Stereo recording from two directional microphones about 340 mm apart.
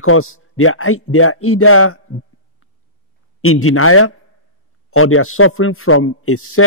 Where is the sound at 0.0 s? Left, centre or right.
Left.